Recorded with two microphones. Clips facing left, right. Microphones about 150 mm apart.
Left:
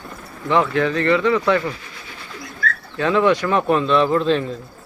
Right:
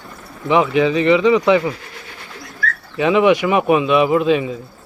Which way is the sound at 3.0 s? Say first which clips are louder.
Right 3 dB; 15° right (ahead or behind).